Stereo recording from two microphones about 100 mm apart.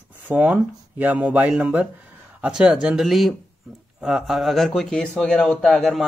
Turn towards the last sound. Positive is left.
turn(degrees=5)  # may be behind; listen again after turning